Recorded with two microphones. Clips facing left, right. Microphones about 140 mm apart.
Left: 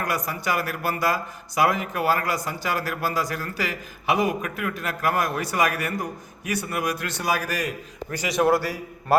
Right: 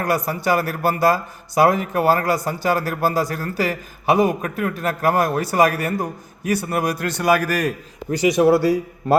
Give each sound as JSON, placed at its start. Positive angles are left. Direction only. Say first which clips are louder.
{"t": 0.0, "sound": "a man's voice", "louder": "right 6 dB", "side_deg": -35}
{"t": 8.1, "sound": "a man's voice", "louder": "right 6 dB", "side_deg": -20}